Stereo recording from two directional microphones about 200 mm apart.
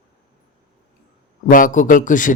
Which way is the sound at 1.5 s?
40° left (ahead or behind).